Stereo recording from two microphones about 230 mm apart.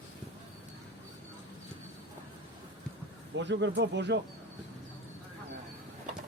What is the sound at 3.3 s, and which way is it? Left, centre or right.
Speech, right.